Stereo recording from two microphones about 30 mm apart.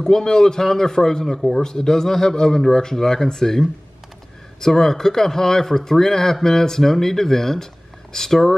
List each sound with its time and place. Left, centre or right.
0.0 s speech: centre